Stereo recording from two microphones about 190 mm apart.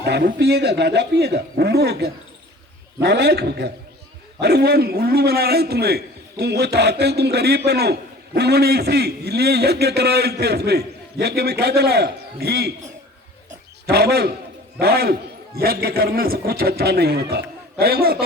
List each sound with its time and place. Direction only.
0.0 s a man's voice: 55° right (ahead or behind)
13.8 s a man's voice: 55° right (ahead or behind)